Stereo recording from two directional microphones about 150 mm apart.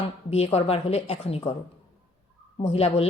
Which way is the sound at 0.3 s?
45° left (ahead or behind).